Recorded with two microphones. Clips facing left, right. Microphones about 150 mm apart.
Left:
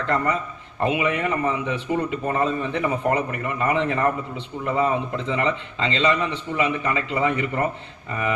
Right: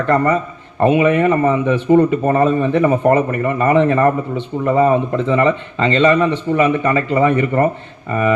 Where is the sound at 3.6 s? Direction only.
60° right (ahead or behind).